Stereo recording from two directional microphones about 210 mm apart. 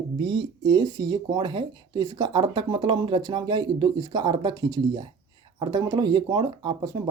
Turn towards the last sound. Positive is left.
turn(degrees=-20)  # may be behind; listen again after turning